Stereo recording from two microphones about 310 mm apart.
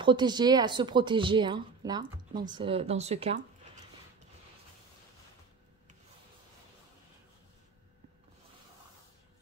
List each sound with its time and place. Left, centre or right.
0.0 s speech: centre